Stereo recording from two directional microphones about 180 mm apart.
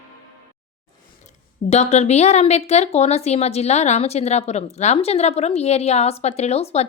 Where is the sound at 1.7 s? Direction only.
40° left (ahead or behind).